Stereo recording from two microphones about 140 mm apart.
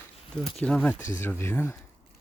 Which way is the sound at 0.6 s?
10° left (ahead or behind).